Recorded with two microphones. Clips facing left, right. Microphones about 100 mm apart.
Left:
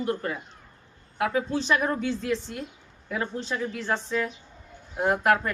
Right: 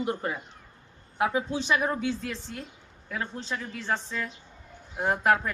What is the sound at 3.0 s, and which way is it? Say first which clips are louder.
Speech: left 4 dB; 5° left (ahead or behind).